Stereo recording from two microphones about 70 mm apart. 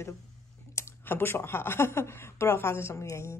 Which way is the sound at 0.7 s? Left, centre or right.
Left.